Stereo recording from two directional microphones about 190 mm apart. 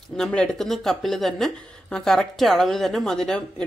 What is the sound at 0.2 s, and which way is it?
A woman's voice, 5° left (ahead or behind).